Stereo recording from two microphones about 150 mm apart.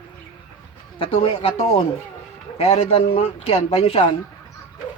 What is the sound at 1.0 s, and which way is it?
Speech, 40° left (ahead or behind).